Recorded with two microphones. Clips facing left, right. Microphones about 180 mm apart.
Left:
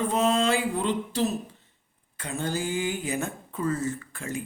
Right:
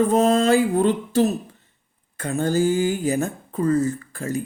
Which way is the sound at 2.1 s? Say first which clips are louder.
Right 9 dB; 45° right (ahead or behind).